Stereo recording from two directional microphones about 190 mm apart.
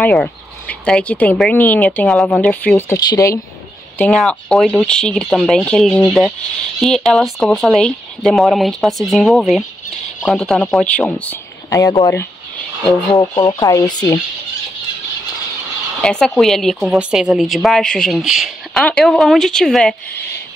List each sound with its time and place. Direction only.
0.0 s speech: 5° left (ahead or behind)
4.0 s speech: 5° left (ahead or behind)
11.7 s speech: 20° left (ahead or behind)
16.0 s speech: 5° left (ahead or behind)